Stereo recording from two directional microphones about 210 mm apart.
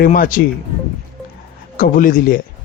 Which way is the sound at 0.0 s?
40° left (ahead or behind).